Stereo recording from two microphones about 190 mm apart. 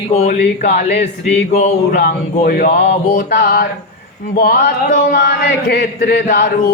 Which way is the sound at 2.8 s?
40° left (ahead or behind).